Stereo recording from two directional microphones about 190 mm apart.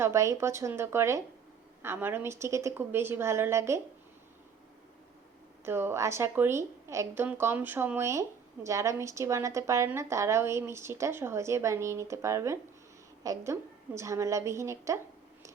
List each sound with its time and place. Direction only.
0.0 s a woman's voice: 15° right (ahead or behind)
5.6 s a woman's voice: 10° right (ahead or behind)